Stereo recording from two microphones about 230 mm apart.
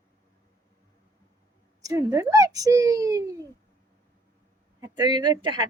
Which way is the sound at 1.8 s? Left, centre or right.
Centre.